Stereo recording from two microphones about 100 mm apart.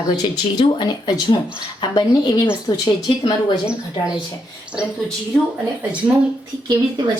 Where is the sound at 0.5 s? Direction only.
50° left (ahead or behind).